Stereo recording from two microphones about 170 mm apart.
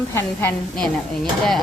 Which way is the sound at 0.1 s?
15° left (ahead or behind).